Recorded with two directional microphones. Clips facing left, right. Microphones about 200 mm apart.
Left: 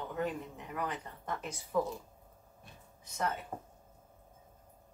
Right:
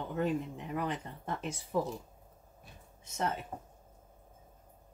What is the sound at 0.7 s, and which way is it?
Speech, 25° right (ahead or behind).